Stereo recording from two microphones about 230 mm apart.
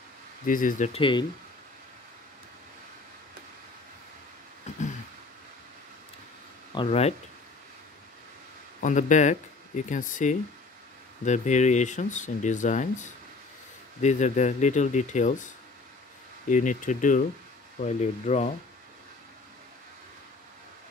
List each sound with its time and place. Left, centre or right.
0.5 s speech: left
4.7 s a sound: left
6.7 s speech: left
8.8 s speech: left